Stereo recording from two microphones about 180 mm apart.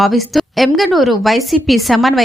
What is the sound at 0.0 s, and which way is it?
A woman's voice, centre (ahead or behind).